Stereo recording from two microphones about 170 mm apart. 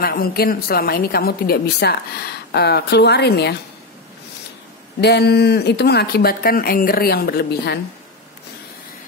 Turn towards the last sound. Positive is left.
turn(degrees=70)  # may be behind; listen again after turning